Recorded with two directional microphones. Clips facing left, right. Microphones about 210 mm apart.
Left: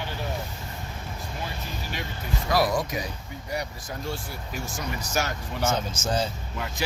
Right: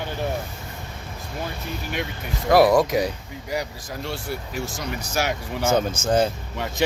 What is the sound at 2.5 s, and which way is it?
Speech, 60° right (ahead or behind).